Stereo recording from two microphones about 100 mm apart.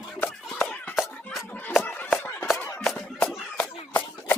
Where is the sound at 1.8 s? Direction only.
15° left (ahead or behind).